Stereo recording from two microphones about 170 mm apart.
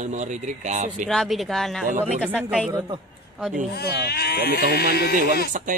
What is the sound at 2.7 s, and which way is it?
Speech, 20° right (ahead or behind).